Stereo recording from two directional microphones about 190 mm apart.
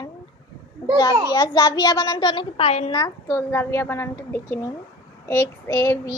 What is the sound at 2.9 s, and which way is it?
A woman's voice, 20° left (ahead or behind).